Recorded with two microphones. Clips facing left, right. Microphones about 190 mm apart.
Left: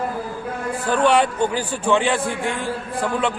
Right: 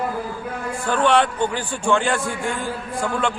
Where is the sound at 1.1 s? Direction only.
10° left (ahead or behind).